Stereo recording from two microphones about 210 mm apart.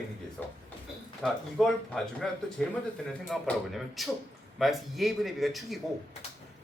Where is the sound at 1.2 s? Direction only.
Centre (ahead or behind).